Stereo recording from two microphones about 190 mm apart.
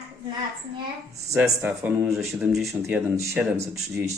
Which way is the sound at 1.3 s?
5° right (ahead or behind).